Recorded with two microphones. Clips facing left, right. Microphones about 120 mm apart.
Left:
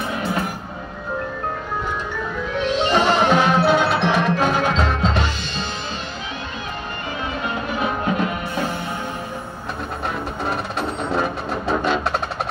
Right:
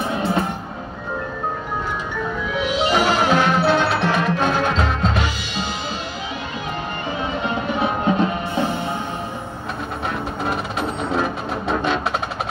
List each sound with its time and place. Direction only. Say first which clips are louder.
0.0 s music: right 3 dB; 30° right (ahead or behind)
2.6 s music: left 1 dB; 10° right (ahead or behind)
7.8 s music: right 3 dB; 25° right (ahead or behind)
10.4 s music: even; centre (ahead or behind)